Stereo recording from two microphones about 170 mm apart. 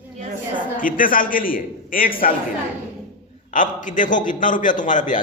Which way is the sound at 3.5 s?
50° left (ahead or behind).